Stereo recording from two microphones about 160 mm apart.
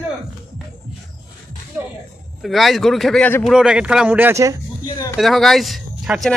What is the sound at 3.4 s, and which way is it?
Speech, 5° right (ahead or behind).